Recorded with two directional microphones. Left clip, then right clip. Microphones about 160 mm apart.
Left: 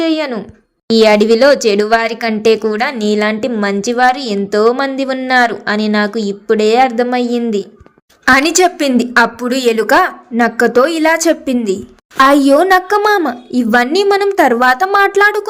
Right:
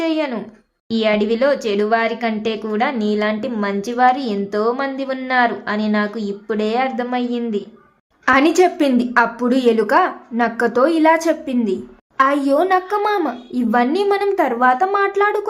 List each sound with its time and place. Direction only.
0.0 s speech: 30° left (ahead or behind)